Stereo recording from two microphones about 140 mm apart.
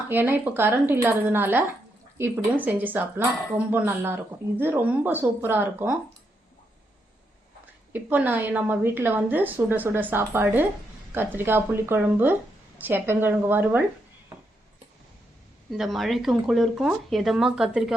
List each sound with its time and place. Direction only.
0.1 s a woman's voice: 15° right (ahead or behind)
7.9 s a woman's voice: 15° right (ahead or behind)
15.7 s speech: centre (ahead or behind)